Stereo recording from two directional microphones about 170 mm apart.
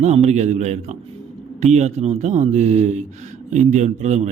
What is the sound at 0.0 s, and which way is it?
Speech, 40° right (ahead or behind).